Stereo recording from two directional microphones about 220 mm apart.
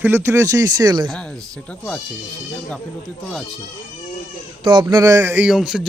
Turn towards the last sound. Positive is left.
turn(degrees=0)  # may be behind; listen again after turning